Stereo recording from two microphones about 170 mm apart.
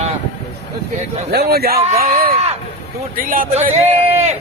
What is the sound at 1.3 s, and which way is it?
Speech, 70° right (ahead or behind).